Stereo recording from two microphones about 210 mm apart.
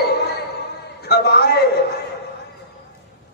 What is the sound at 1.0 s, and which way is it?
Speech, 50° left (ahead or behind).